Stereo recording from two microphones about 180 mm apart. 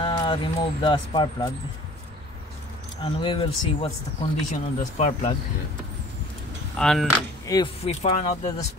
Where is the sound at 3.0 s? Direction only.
30° left (ahead or behind).